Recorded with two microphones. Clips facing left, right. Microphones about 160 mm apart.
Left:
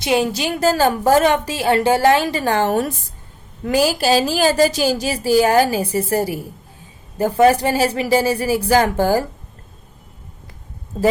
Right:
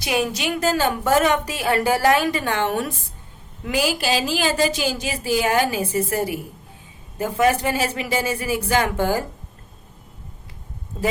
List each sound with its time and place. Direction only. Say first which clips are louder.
0.0 s a woman's voice: left 4 dB; 30° left (ahead or behind)